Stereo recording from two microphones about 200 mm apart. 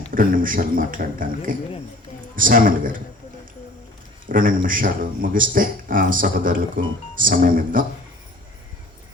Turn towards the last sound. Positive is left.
turn(degrees=-45)  # may be behind; listen again after turning